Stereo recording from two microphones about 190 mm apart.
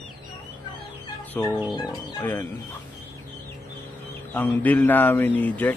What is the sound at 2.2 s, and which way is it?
Speech, 10° left (ahead or behind).